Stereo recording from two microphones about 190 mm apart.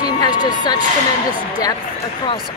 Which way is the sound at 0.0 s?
20° left (ahead or behind).